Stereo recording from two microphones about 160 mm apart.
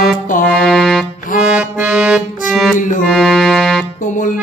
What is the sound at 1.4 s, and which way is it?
Accordion, 5° right (ahead or behind).